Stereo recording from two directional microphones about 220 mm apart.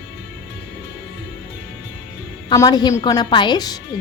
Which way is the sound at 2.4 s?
15° left (ahead or behind).